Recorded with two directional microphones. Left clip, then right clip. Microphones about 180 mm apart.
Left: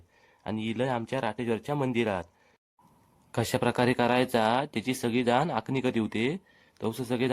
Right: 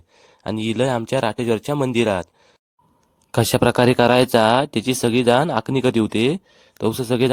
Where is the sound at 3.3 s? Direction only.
45° right (ahead or behind).